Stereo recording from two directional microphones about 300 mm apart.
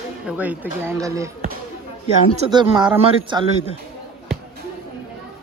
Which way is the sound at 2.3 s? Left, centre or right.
Centre.